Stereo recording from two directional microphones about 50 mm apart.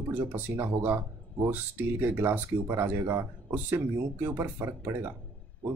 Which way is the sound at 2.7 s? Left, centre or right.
Right.